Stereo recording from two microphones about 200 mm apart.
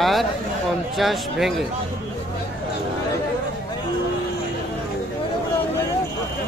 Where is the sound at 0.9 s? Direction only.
Centre (ahead or behind).